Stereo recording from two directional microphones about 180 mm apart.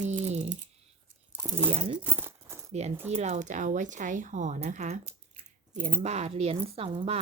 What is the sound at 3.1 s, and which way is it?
A woman's voice, 35° right (ahead or behind).